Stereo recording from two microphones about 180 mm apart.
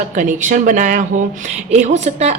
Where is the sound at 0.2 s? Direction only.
45° right (ahead or behind).